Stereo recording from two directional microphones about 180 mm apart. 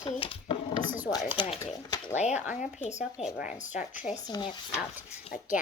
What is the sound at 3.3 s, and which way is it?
Speech, 45° left (ahead or behind).